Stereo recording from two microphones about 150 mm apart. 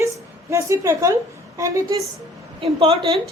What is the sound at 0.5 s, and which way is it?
A woman's voice, 20° right (ahead or behind).